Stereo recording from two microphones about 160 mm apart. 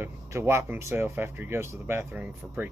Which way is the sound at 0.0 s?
15° right (ahead or behind).